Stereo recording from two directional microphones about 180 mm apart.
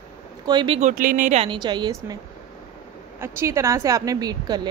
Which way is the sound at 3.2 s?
15° right (ahead or behind).